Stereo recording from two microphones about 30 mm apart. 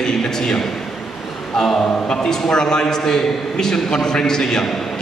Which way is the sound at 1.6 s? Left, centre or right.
Centre.